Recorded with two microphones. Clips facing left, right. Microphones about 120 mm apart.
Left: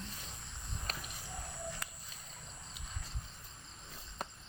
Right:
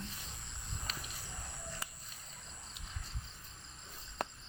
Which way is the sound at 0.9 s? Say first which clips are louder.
Left 3 dB; 50° left (ahead or behind).